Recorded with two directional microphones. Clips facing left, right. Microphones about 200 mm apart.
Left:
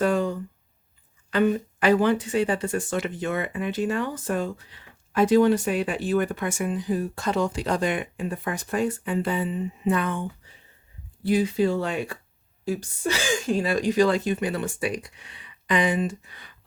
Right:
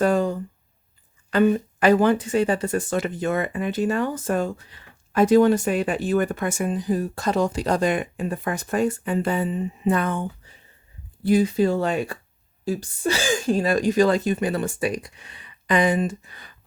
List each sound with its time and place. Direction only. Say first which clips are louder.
0.0 s a sound: right 3 dB; 40° right (ahead or behind)
1.3 s speech: right 3 dB; 45° right (ahead or behind)
11.3 s speech: right 3 dB; 45° right (ahead or behind)